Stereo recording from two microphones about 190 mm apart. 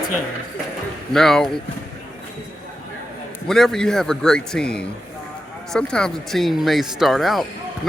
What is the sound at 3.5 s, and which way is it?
Speech, centre (ahead or behind).